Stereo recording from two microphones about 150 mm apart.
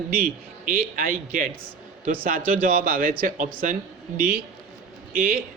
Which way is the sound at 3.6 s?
60° right (ahead or behind).